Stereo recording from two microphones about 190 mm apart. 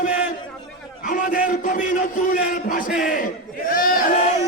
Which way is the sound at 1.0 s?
45° left (ahead or behind).